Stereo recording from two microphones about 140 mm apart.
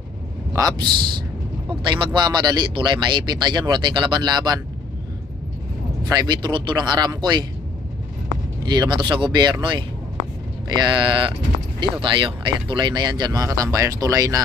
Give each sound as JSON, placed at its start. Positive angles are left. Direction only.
{"t": 0.5, "sound": "a man's voice", "side_deg": -25}
{"t": 0.8, "sound": "a man's voice", "side_deg": -90}
{"t": 1.7, "sound": "speech", "side_deg": -35}
{"t": 6.0, "sound": "speech", "side_deg": -30}
{"t": 8.6, "sound": "speech", "side_deg": -30}